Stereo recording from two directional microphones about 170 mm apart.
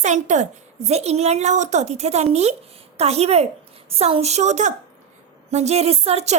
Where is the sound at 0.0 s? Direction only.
45° right (ahead or behind).